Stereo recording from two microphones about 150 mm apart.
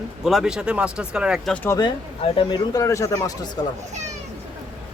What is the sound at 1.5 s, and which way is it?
Speech, 15° left (ahead or behind).